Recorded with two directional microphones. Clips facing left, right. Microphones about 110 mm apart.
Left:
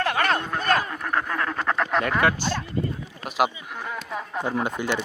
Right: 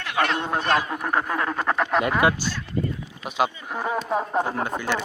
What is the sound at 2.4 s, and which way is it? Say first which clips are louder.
Speech: left 3 dB; 50° left (ahead or behind).